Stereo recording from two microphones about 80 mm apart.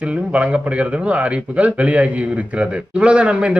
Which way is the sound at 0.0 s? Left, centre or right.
Centre.